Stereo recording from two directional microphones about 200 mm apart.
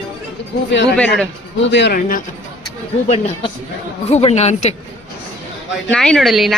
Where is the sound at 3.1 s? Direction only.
30° left (ahead or behind).